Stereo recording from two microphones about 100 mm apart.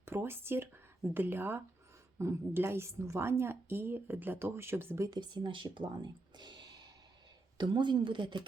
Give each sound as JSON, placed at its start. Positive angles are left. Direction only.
{"t": 0.0, "sound": "a sound", "side_deg": -25}
{"t": 1.1, "sound": "a woman's voice", "side_deg": -20}
{"t": 5.1, "sound": "speech", "side_deg": -45}
{"t": 7.6, "sound": "speech", "side_deg": -50}